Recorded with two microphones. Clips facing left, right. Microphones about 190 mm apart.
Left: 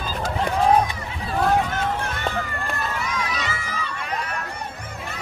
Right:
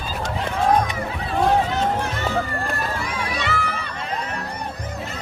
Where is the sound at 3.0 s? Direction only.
30° right (ahead or behind).